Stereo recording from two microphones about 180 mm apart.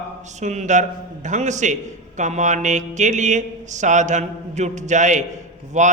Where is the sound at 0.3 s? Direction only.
40° right (ahead or behind).